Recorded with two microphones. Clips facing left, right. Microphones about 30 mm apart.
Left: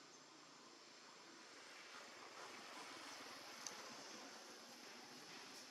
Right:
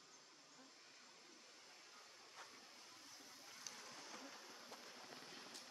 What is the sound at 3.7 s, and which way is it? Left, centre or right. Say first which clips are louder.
Vehicle: left 2 dB; centre.